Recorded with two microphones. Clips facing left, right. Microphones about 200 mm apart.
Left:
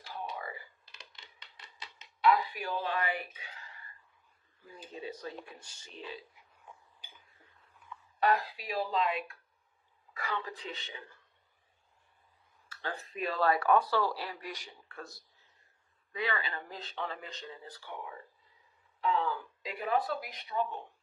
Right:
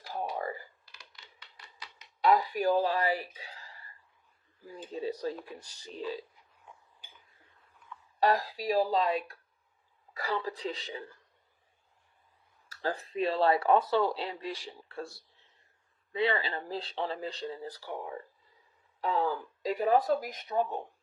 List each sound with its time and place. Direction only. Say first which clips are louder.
0.1 s computer keyboard: right 6 dB; 40° right (ahead or behind)
0.9 s a sound: left 1 dB; 25° left (ahead or behind)
2.2 s a sound: right 3 dB; 40° right (ahead or behind)
4.9 s speech: right 7 dB; 35° right (ahead or behind)
8.2 s speech: right 2 dB; 35° right (ahead or behind)
12.6 s speech: right 6 dB; 35° right (ahead or behind)